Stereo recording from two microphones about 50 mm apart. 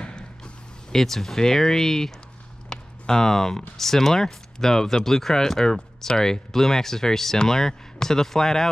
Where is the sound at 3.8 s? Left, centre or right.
Centre.